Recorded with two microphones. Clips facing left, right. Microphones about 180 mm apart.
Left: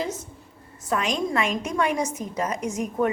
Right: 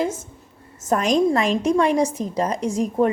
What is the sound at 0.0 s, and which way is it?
A woman's voice, 50° right (ahead or behind).